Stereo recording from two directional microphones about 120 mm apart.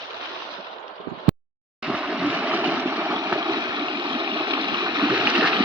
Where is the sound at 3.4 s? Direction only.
35° right (ahead or behind).